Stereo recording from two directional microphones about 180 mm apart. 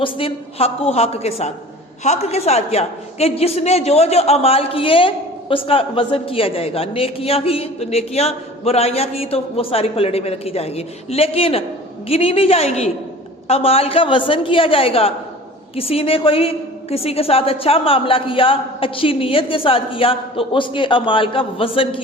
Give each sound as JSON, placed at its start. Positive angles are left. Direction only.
{"t": 0.0, "sound": "a man's voice", "side_deg": 30}